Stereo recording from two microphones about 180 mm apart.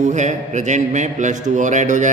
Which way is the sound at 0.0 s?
40° right (ahead or behind).